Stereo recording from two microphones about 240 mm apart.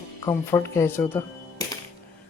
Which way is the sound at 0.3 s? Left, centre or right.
Centre.